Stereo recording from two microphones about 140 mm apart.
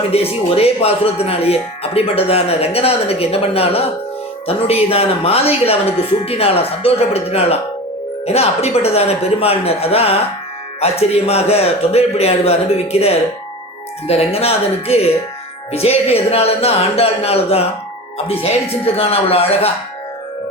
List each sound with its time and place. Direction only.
0.1 s speech: 45° left (ahead or behind)